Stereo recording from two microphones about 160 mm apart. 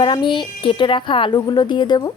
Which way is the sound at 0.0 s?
30° left (ahead or behind).